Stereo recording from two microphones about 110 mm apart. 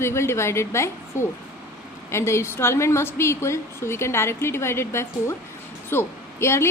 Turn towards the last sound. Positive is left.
turn(degrees=25)  # may be behind; listen again after turning